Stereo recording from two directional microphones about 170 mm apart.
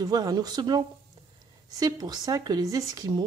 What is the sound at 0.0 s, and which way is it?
Speech, 20° right (ahead or behind).